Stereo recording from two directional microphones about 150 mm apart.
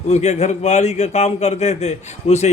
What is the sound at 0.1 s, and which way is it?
A man's voice, 50° left (ahead or behind).